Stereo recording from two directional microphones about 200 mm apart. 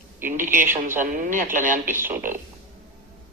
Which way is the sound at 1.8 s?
10° right (ahead or behind).